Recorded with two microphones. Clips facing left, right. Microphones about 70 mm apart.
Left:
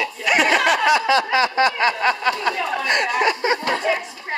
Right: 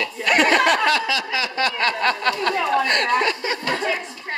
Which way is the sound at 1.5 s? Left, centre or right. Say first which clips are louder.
Left 4 dB; centre.